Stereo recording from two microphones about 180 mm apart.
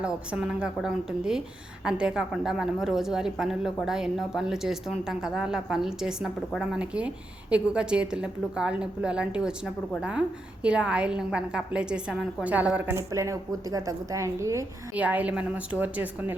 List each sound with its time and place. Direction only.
0.0 s a woman's voice: 5° right (ahead or behind)